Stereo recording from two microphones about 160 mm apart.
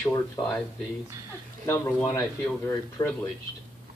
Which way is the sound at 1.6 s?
15° left (ahead or behind).